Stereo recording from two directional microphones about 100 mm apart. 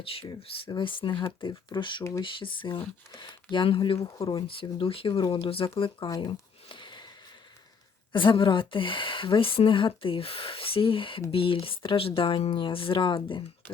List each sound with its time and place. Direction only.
0.7 s a woman's voice: 55° left (ahead or behind)
5.2 s speech: 50° left (ahead or behind)
5.5 s a woman's voice: 70° left (ahead or behind)
6.1 s speech: 40° left (ahead or behind)
6.7 s sniff: 55° left (ahead or behind)
8.1 s a woman's voice: 55° left (ahead or behind)